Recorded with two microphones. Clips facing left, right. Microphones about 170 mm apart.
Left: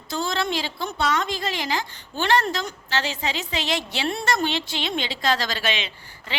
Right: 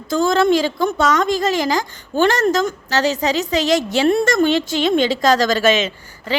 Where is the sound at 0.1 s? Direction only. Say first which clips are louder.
Right 11 dB; 50° right (ahead or behind).